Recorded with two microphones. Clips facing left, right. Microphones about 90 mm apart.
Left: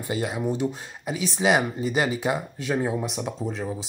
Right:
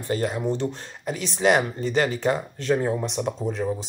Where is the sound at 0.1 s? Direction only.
5° left (ahead or behind).